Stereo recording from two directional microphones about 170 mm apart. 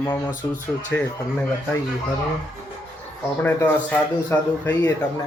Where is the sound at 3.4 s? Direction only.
10° left (ahead or behind).